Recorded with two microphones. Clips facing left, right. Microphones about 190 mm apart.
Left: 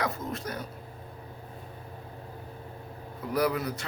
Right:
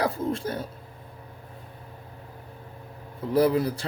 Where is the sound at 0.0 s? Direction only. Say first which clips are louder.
Right 6 dB; 30° right (ahead or behind).